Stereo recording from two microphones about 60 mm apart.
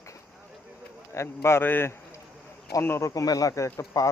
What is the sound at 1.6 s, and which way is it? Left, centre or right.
Speech, left.